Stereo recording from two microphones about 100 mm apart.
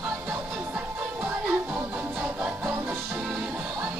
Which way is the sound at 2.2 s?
20° right (ahead or behind).